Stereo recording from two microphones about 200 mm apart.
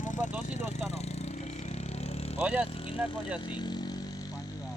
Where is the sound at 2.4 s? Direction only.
5° right (ahead or behind).